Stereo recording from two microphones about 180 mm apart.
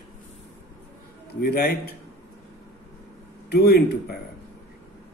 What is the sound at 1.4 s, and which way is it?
Speech, 60° left (ahead or behind).